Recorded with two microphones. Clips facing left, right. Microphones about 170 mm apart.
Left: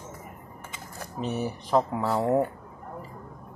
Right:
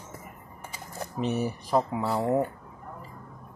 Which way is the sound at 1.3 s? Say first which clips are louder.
Left 1 dB; centre (ahead or behind).